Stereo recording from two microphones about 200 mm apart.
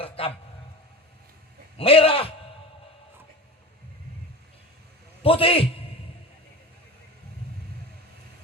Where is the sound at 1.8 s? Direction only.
30° left (ahead or behind).